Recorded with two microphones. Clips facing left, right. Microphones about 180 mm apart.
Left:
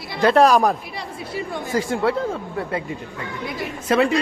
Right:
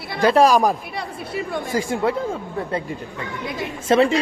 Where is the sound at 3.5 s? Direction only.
20° right (ahead or behind).